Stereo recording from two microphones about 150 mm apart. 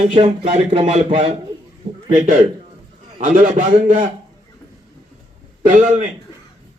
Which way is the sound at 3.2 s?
60° right (ahead or behind).